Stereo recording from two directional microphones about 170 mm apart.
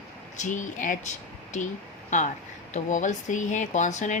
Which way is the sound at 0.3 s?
45° left (ahead or behind).